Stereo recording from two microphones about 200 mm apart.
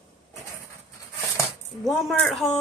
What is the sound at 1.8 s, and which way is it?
Speech, centre (ahead or behind).